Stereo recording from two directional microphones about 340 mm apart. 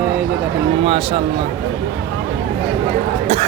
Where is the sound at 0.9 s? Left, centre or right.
Centre.